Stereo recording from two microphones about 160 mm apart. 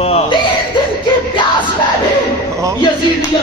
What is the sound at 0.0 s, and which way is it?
Chuckle, 40° left (ahead or behind).